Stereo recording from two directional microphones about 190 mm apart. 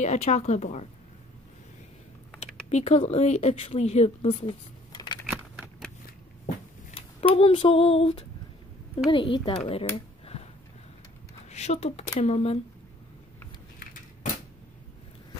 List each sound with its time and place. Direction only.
0.0 s female singing: 35° left (ahead or behind)
2.4 s speech: 35° left (ahead or behind)
5.3 s a sound: centre (ahead or behind)
6.9 s a sound: 30° left (ahead or behind)
7.3 s female singing: 30° left (ahead or behind)
9.1 s a woman's voice: 25° left (ahead or behind)
10.2 s a sound: 30° left (ahead or behind)
11.4 s a woman's voice: 35° left (ahead or behind)
12.2 s female singing: 35° left (ahead or behind)